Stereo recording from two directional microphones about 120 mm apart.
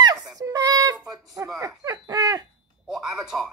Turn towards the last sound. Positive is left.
turn(degrees=-5)  # may be behind; listen again after turning